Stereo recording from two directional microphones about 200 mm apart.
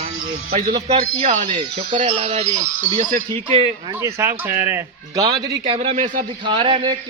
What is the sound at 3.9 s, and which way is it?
Speech, 15° right (ahead or behind).